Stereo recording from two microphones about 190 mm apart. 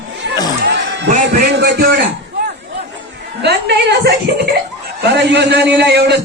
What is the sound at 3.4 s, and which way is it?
Speech, 60° right (ahead or behind).